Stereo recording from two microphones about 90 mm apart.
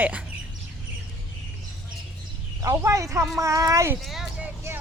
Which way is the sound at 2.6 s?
35° right (ahead or behind).